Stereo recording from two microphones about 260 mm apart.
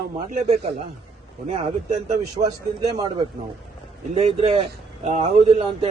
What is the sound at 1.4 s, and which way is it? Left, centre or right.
Speech, right.